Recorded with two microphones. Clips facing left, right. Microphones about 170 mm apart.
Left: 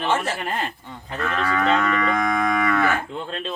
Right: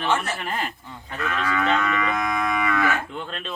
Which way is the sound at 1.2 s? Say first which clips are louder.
Left 2 dB; 45° left (ahead or behind).